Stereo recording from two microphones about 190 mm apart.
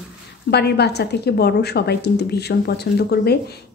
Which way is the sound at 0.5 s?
60° left (ahead or behind).